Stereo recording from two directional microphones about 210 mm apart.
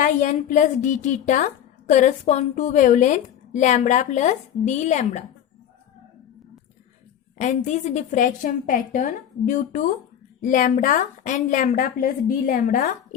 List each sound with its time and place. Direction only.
0.0 s a woman's voice: 40° left (ahead or behind)
7.3 s a woman's voice: 35° left (ahead or behind)